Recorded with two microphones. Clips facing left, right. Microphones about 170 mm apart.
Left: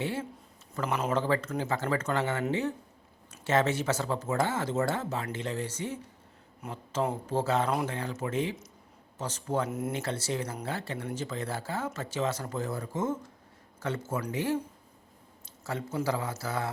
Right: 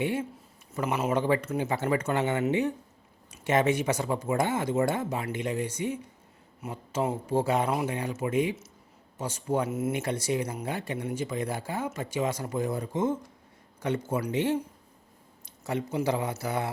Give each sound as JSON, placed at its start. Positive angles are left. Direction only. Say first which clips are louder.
{"t": 0.0, "sound": "speech", "louder": "right 4 dB", "side_deg": -15}
{"t": 9.9, "sound": "speech", "louder": "right 4 dB", "side_deg": -15}